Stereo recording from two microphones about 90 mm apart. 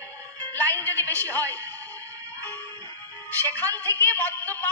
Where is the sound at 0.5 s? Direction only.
20° left (ahead or behind).